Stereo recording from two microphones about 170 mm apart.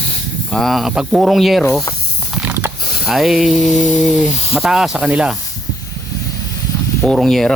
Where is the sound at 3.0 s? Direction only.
Centre (ahead or behind).